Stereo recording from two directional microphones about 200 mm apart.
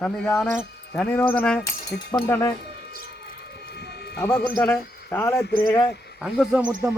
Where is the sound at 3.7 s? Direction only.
55° left (ahead or behind).